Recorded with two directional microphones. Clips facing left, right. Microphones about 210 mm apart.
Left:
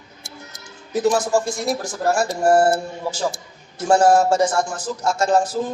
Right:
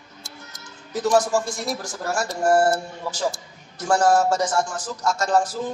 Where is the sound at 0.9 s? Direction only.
25° left (ahead or behind).